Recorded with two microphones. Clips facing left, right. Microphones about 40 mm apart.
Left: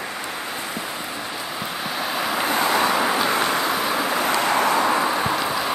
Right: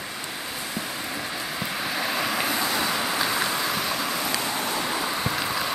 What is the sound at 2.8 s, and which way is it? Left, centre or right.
Vehicle, left.